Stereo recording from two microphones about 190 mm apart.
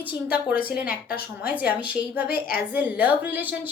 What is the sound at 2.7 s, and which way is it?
A woman's voice, 10° right (ahead or behind).